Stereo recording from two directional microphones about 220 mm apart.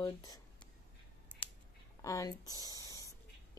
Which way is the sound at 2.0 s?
15° left (ahead or behind).